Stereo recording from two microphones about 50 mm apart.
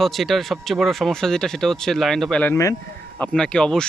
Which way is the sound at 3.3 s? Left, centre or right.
Centre.